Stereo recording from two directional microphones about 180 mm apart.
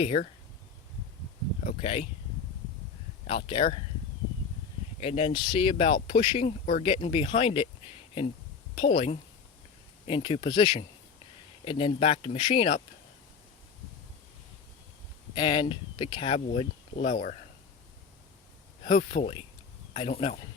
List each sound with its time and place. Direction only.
0.0 s speech: 35° left (ahead or behind)
1.8 s speech: 35° left (ahead or behind)
3.2 s speech: 30° left (ahead or behind)
4.9 s speech: 35° left (ahead or behind)
8.7 s speech: 30° left (ahead or behind)
15.4 s speech: 30° left (ahead or behind); by 17.3 s 45° left (ahead or behind)
18.8 s speech: 40° left (ahead or behind)